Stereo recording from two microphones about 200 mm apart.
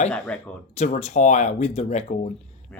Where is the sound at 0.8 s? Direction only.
35° left (ahead or behind).